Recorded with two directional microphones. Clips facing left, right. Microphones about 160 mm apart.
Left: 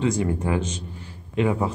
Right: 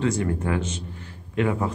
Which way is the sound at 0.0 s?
15° left (ahead or behind).